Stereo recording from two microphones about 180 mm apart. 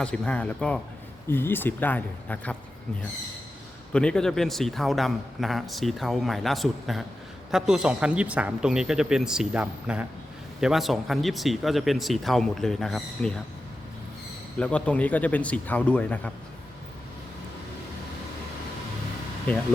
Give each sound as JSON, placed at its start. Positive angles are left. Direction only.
{"t": 0.0, "sound": "a man's voice", "side_deg": 5}
{"t": 3.9, "sound": "a man's voice", "side_deg": 5}
{"t": 14.6, "sound": "a man's voice", "side_deg": 5}